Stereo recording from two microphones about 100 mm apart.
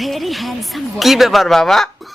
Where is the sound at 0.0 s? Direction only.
Centre (ahead or behind).